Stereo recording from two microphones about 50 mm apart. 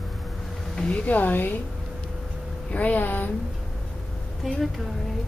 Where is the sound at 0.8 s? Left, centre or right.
Left.